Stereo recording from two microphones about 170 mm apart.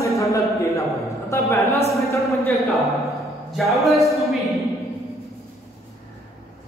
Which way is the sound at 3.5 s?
Centre (ahead or behind).